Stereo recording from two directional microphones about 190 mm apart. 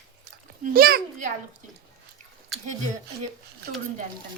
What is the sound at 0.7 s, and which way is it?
Speech, 50° right (ahead or behind).